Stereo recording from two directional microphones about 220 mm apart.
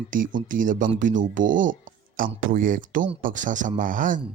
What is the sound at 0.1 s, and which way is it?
Speech, 35° right (ahead or behind).